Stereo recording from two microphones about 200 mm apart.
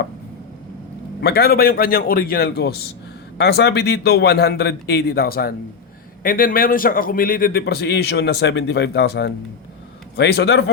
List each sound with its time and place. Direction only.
1.2 s a man's voice: 50° left (ahead or behind)